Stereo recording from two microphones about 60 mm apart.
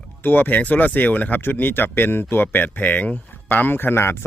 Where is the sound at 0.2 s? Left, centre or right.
Left.